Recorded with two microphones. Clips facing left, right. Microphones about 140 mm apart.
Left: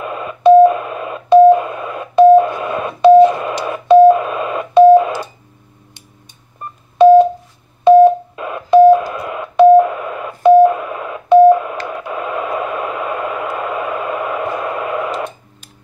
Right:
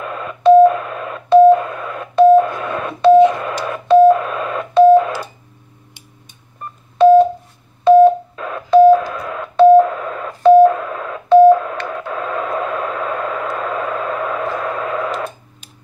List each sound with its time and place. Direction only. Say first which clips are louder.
0.0 s telephone dialing: left 2 dB; 15° left (ahead or behind)
7.0 s telephone dialing: left 2 dB; 15° left (ahead or behind)
11.9 s radio: left 1 dB; 10° left (ahead or behind)